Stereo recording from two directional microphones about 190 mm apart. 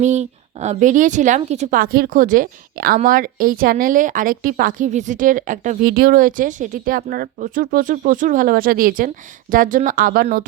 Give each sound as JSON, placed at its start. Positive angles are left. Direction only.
{"t": 0.0, "sound": "a woman's voice", "side_deg": -40}